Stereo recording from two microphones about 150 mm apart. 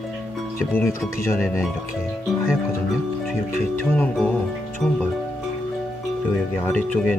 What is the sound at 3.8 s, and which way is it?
Speech, 10° left (ahead or behind).